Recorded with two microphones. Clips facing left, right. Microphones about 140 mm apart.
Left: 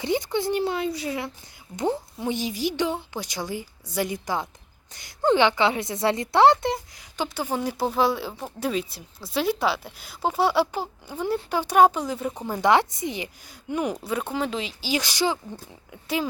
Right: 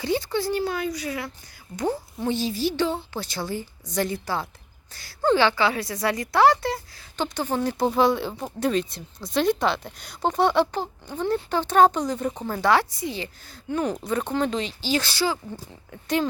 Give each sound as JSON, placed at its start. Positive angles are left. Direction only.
{"t": 0.0, "sound": "a woman's voice", "side_deg": 20}
{"t": 7.2, "sound": "speech", "side_deg": 10}
{"t": 15.9, "sound": "speech", "side_deg": 5}